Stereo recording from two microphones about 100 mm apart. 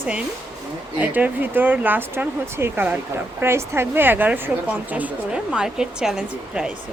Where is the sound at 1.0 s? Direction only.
15° right (ahead or behind).